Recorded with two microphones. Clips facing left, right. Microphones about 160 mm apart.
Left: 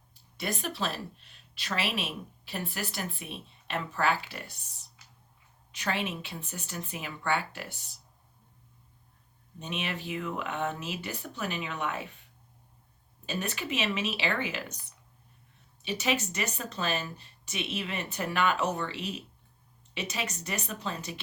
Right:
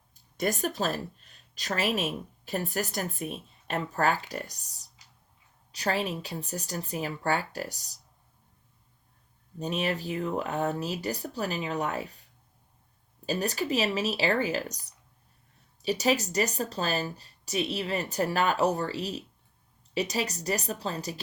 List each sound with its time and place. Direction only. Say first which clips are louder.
0.1 s speech: right 6 dB; 45° right (ahead or behind)
9.6 s speech: right 6 dB; 40° right (ahead or behind)
13.2 s speech: right 5 dB; 35° right (ahead or behind)